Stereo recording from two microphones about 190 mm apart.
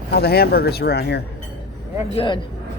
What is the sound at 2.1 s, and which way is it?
Speech, 30° left (ahead or behind).